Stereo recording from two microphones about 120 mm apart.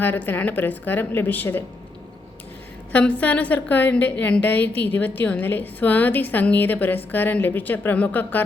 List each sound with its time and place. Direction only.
0.0 s a woman's voice: 15° left (ahead or behind)
2.9 s a woman's voice: 15° left (ahead or behind)